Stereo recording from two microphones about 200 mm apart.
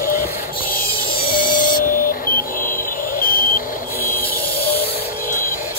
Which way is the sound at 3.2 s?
45° left (ahead or behind).